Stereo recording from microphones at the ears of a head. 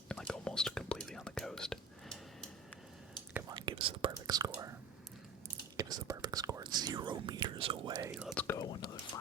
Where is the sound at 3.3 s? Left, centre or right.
Right.